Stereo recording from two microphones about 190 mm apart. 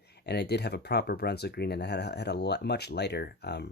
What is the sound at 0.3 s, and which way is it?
Speech, 60° left (ahead or behind).